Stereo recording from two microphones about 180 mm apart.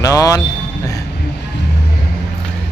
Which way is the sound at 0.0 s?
20° left (ahead or behind).